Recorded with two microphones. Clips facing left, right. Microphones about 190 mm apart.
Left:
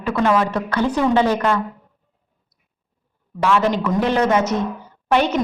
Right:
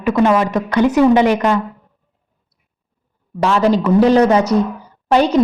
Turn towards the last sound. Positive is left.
turn(degrees=-35)  # may be behind; listen again after turning